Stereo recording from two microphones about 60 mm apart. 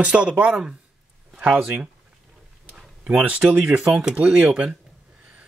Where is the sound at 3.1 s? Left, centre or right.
Right.